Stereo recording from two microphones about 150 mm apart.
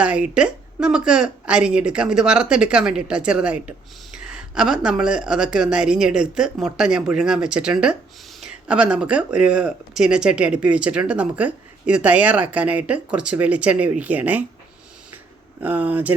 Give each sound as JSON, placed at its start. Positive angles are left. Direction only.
{"t": 0.0, "sound": "a woman's voice", "side_deg": -10}
{"t": 15.6, "sound": "speech", "side_deg": -10}